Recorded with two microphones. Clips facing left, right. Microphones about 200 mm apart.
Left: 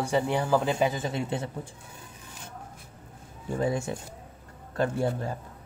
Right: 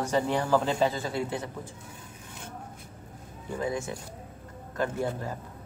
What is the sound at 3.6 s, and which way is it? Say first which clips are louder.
Speech: left 3 dB; 30° left (ahead or behind).